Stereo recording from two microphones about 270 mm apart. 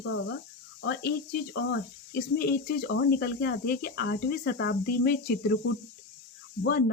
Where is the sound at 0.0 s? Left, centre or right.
Left.